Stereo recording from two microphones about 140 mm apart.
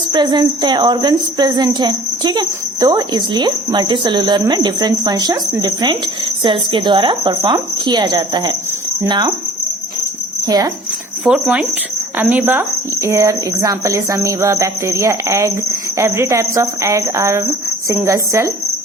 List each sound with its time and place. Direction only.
0.1 s speech: 30° right (ahead or behind)
10.4 s speech: 25° right (ahead or behind)
11.3 s speech: 5° right (ahead or behind)